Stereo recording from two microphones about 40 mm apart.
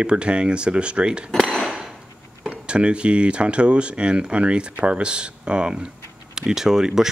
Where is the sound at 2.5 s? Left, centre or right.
Right; by 7.0 s centre.